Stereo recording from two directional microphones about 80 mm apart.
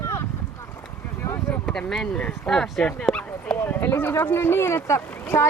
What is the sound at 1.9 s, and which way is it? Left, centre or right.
Speech, centre.